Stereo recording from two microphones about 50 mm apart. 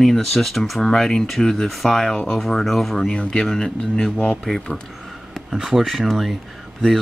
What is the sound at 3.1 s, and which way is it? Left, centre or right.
Speech, centre.